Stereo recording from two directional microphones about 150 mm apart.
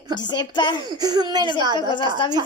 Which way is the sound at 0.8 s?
25° right (ahead or behind).